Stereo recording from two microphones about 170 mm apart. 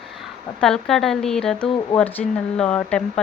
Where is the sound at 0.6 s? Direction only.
Centre (ahead or behind).